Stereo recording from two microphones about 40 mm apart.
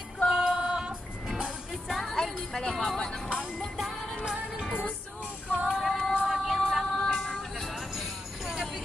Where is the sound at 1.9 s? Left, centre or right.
Centre.